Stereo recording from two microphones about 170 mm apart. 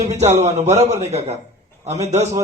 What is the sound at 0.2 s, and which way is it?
A man's voice, 40° right (ahead or behind).